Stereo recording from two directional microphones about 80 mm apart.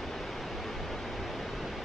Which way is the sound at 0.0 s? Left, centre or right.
Centre.